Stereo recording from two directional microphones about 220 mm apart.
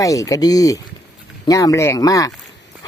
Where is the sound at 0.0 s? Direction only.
15° left (ahead or behind).